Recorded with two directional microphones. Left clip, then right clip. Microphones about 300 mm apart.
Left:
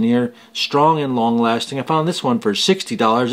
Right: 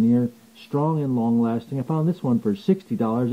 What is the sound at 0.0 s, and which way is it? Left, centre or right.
Speech, centre.